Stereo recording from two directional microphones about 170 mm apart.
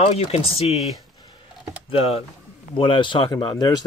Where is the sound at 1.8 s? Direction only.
35° left (ahead or behind).